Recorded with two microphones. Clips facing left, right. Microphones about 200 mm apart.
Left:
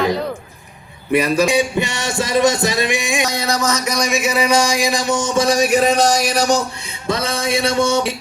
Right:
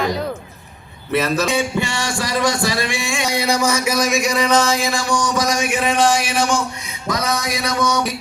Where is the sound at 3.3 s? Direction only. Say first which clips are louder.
Right 1 dB; 10° right (ahead or behind); by 6.6 s 40° left (ahead or behind).